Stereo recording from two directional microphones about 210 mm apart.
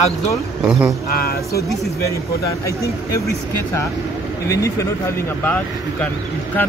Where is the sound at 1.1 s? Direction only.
45° left (ahead or behind).